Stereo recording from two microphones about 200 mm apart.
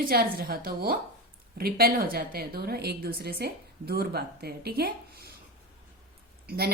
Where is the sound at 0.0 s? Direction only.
45° right (ahead or behind).